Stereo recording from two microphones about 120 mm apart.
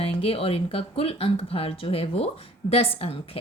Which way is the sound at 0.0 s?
55° left (ahead or behind).